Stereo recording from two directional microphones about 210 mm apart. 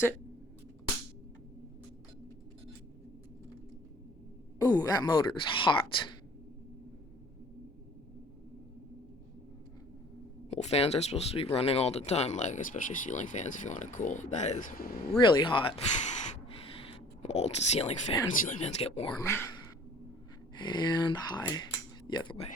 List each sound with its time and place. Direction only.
4.6 s speech: 15° left (ahead or behind)
10.5 s speech: 30° left (ahead or behind)
15.2 s speech: 25° left (ahead or behind)
19.2 s speech: 10° left (ahead or behind)
20.6 s speech: 20° left (ahead or behind)